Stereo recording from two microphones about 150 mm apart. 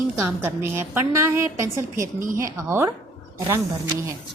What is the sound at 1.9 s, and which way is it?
Speech, 60° right (ahead or behind).